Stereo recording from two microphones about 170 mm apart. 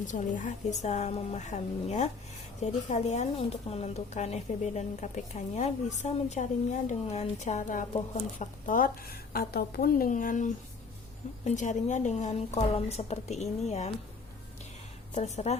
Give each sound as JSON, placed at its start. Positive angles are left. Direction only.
{"t": 0.1, "sound": "a woman's voice", "side_deg": 45}
{"t": 15.1, "sound": "a woman's voice", "side_deg": 40}